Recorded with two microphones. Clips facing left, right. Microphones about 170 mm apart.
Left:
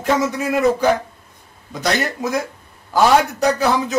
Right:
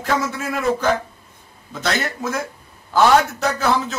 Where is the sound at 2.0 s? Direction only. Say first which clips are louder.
Left 3 dB; 15° left (ahead or behind).